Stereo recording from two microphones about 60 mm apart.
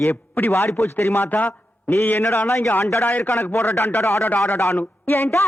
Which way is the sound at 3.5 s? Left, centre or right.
Left.